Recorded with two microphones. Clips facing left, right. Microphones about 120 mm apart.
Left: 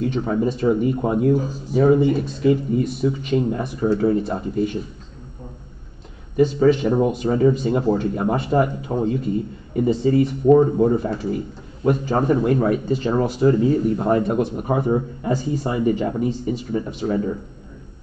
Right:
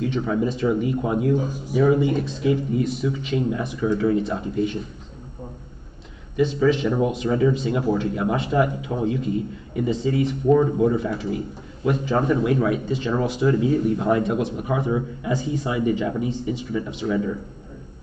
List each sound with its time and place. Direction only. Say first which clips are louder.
0.0 s speech: left 2 dB; 40° left (ahead or behind)
1.4 s speech: even; 15° right (ahead or behind)
1.8 s speech: left 3 dB; 45° left (ahead or behind)
6.3 s speech: left 4 dB; 45° left (ahead or behind)